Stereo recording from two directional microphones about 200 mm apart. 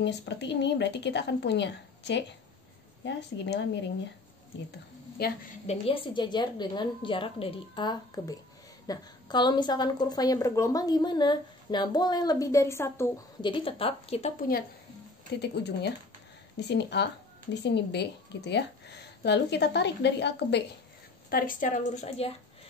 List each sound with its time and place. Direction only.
0.0 s a woman's voice: 60° left (ahead or behind)
5.1 s a woman's voice: 50° left (ahead or behind)
5.7 s a woman's voice: 25° left (ahead or behind)
15.4 s a woman's voice: 55° left (ahead or behind)
21.3 s speech: 45° left (ahead or behind)